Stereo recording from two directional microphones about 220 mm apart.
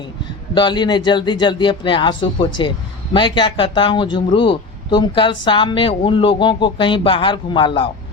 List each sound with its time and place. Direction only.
0.5 s speech: 20° left (ahead or behind)